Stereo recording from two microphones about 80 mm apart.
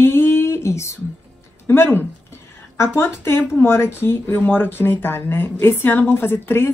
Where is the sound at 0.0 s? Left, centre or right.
Left.